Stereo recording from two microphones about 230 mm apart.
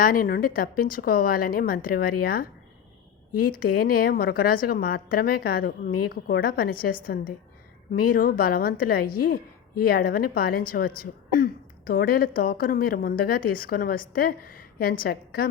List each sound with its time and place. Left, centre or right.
0.0 s speech: left
3.6 s speech: left